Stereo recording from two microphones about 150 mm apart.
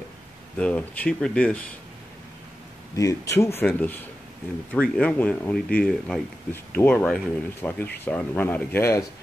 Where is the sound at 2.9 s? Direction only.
20° left (ahead or behind).